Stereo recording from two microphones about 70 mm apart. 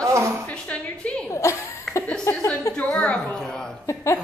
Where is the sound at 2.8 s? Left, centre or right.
Centre.